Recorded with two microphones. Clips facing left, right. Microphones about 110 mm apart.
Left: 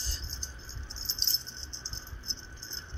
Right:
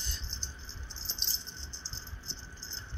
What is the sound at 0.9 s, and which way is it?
Keys jangling, 30° left (ahead or behind).